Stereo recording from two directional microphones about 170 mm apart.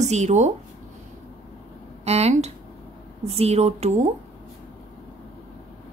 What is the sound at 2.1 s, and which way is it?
A woman's voice, 40° right (ahead or behind).